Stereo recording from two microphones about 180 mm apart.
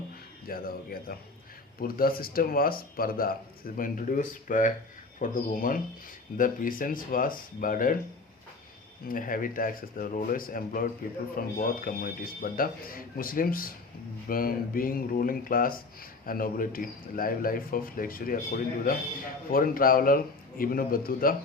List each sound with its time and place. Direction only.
0.4 s speech: 55° left (ahead or behind)
9.0 s speech: 50° left (ahead or behind)